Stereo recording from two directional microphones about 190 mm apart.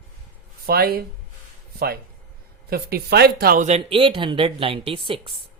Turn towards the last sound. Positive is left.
turn(degrees=-30)  # may be behind; listen again after turning